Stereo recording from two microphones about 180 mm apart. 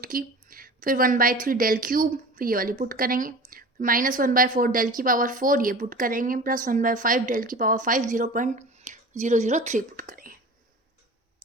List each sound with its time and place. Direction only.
0.0 s a woman's voice: 50° right (ahead or behind)